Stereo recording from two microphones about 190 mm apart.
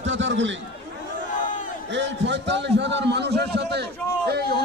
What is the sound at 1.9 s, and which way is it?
A man's voice, 70° right (ahead or behind).